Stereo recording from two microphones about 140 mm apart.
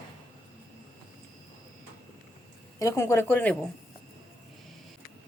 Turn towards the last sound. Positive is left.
turn(degrees=15)  # may be behind; listen again after turning